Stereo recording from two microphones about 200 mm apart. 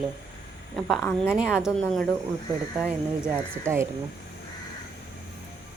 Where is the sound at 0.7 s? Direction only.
5° left (ahead or behind).